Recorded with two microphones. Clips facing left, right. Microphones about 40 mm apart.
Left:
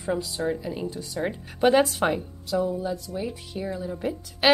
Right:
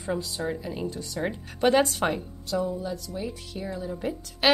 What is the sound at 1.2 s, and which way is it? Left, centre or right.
A woman's voice, centre.